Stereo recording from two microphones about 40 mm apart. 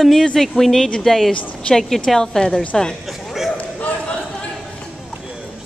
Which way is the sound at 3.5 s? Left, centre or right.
Left.